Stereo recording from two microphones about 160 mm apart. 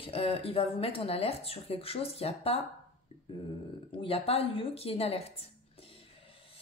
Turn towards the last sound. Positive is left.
turn(degrees=40)  # may be behind; listen again after turning